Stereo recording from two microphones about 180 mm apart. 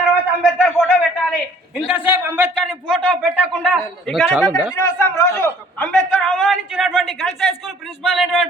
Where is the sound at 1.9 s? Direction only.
10° right (ahead or behind).